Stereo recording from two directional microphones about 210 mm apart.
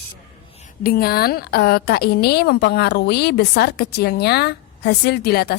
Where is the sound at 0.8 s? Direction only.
45° left (ahead or behind).